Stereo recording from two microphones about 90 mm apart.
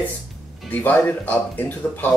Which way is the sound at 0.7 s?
20° left (ahead or behind).